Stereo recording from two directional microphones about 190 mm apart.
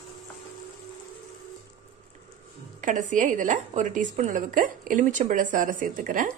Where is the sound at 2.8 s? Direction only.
40° right (ahead or behind).